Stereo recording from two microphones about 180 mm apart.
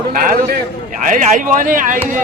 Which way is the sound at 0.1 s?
50° right (ahead or behind).